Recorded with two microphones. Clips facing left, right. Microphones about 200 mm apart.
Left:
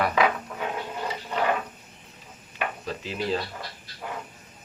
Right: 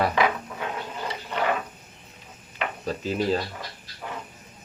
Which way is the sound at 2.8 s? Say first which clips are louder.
Right 5 dB; 40° right (ahead or behind).